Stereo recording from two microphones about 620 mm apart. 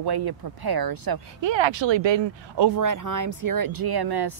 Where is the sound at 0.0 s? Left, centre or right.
Right.